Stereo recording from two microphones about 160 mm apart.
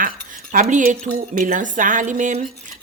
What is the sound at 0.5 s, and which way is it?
Speech, 55° right (ahead or behind).